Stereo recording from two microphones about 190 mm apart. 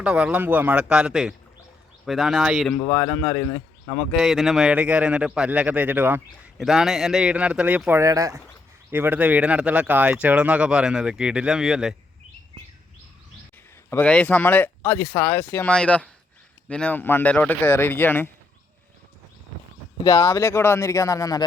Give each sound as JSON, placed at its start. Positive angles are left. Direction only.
{"t": 0.0, "sound": "a man's voice", "side_deg": -5}
{"t": 4.2, "sound": "a man's voice", "side_deg": 0}
{"t": 13.9, "sound": "speech", "side_deg": 5}
{"t": 20.1, "sound": "speech", "side_deg": 15}